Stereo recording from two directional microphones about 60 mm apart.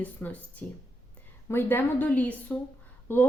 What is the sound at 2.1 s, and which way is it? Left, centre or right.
Speech, left.